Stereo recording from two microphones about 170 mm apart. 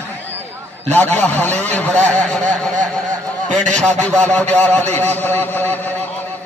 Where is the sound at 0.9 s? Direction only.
10° left (ahead or behind).